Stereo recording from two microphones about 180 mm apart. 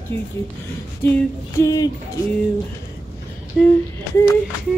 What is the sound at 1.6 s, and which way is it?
Hoot, 20° left (ahead or behind).